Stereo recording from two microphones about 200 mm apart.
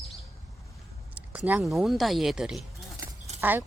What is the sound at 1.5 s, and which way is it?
Speech, 5° right (ahead or behind).